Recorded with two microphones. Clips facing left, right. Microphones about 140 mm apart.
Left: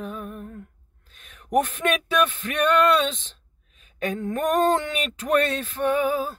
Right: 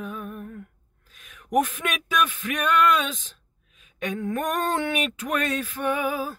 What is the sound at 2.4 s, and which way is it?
Speech, 35° left (ahead or behind).